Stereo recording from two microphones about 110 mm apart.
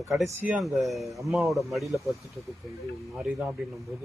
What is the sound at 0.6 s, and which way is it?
Speech, centre (ahead or behind).